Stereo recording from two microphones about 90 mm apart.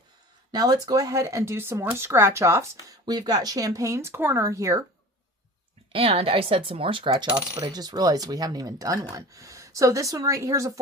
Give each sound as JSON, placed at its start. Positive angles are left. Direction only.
{"t": 0.5, "sound": "speech", "side_deg": -50}
{"t": 3.1, "sound": "speech", "side_deg": -50}
{"t": 5.9, "sound": "speech", "side_deg": -90}
{"t": 7.5, "sound": "speech", "side_deg": -50}